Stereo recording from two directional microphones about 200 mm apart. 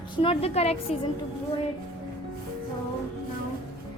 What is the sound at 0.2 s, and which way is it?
Speech, 30° left (ahead or behind).